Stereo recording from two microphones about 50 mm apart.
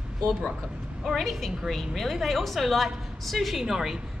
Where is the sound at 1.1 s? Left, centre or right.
Centre.